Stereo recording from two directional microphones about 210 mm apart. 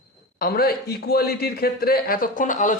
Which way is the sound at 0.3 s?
45° left (ahead or behind).